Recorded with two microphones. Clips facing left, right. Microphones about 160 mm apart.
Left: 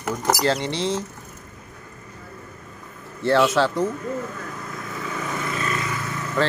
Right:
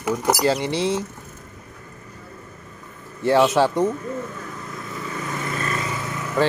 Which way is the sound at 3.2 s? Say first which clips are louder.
Right 2 dB; 15° right (ahead or behind).